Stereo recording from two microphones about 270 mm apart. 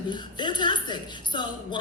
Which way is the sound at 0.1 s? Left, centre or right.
Centre.